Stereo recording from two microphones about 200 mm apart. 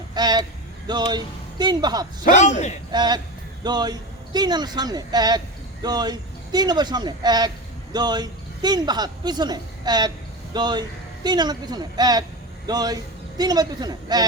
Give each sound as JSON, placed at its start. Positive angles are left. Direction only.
{"t": 0.1, "sound": "speech", "side_deg": -20}
{"t": 2.2, "sound": "a man's voice", "side_deg": 35}
{"t": 2.9, "sound": "a man's voice", "side_deg": -20}